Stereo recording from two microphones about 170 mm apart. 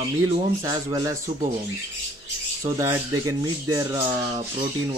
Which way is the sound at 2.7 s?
20° right (ahead or behind).